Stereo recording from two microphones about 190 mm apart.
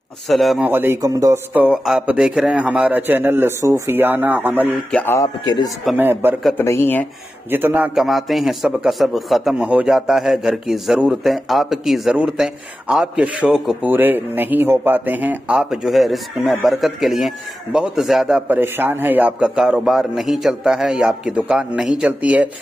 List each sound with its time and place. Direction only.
0.3 s a man's voice: centre (ahead or behind)
0.7 s speech: 10° right (ahead or behind)
4.9 s speech: 10° left (ahead or behind)
5.9 s speech: 10° right (ahead or behind)
6.6 s speech: 10° left (ahead or behind)
7.5 s a man's voice: 10° right (ahead or behind)